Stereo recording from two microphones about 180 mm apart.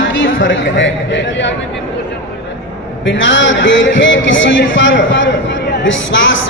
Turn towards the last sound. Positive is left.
turn(degrees=90)